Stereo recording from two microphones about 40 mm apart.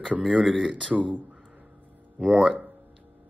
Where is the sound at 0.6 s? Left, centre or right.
Right.